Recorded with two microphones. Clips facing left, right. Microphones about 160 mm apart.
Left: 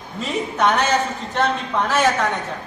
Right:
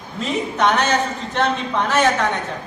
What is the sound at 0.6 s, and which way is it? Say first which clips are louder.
A man's voice: even; 5° left (ahead or behind).